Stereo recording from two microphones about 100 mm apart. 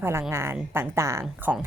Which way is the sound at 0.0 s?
25° right (ahead or behind).